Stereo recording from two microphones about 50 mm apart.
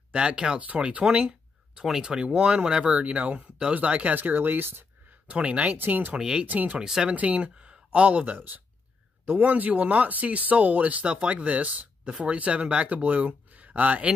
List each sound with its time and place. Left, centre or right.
0.1 s speech: right
0.6 s speech: right
5.3 s speech: right
5.8 s speech: right
6.1 s speech: centre
6.4 s speech: right
6.8 s speech: centre
7.2 s speech: right